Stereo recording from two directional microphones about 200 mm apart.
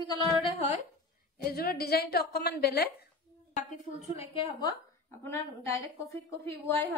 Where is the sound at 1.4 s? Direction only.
50° left (ahead or behind).